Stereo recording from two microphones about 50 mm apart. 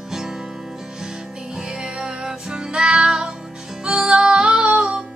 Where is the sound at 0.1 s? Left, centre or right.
Centre.